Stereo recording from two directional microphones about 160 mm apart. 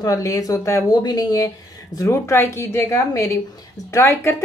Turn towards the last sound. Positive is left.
turn(degrees=15)  # may be behind; listen again after turning